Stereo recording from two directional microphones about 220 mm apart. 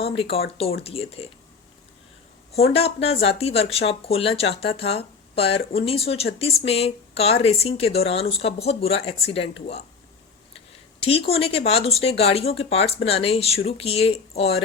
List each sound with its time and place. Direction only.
0.2 s speech: 25° left (ahead or behind)
2.7 s speech: 25° left (ahead or behind)
11.3 s speech: 25° left (ahead or behind)